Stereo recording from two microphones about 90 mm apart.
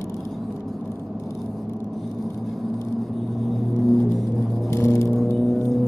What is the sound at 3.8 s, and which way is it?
Music, centre (ahead or behind).